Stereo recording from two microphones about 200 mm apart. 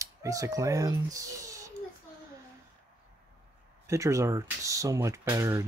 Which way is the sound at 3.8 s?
15° right (ahead or behind).